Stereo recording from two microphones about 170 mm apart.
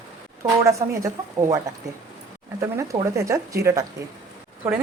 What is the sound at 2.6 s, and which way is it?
Speech, 20° right (ahead or behind).